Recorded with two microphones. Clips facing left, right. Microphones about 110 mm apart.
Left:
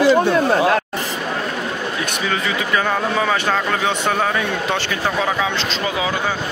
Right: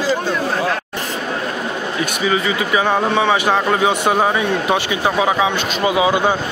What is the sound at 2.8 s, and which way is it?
Speech, 20° right (ahead or behind).